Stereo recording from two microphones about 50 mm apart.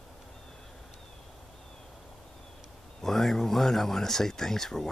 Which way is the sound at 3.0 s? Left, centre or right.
Centre.